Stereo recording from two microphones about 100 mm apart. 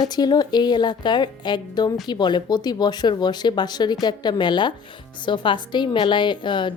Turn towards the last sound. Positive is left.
turn(degrees=50)  # may be behind; listen again after turning